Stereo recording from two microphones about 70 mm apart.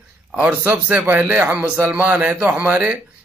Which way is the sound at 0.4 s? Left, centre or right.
Right.